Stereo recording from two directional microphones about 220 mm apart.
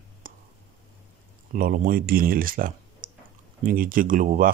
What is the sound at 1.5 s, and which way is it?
Speech, 40° right (ahead or behind).